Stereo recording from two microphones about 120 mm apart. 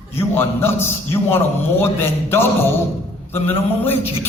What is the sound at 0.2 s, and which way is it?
A man's voice, 20° left (ahead or behind).